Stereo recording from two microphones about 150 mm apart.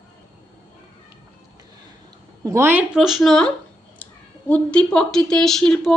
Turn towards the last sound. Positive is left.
turn(degrees=5)  # may be behind; listen again after turning